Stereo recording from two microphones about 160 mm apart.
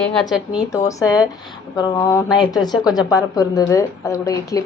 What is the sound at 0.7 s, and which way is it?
A woman's voice, 20° left (ahead or behind).